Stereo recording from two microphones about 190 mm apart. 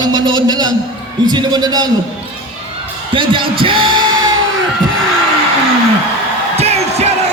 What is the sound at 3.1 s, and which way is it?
Speech, 25° right (ahead or behind).